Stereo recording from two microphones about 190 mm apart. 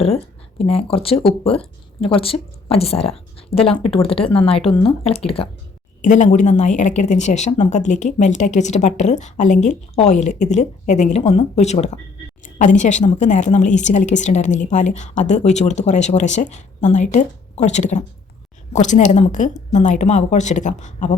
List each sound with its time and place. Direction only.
0.6 s speech: 30° left (ahead or behind)
6.0 s speech: 40° left (ahead or behind)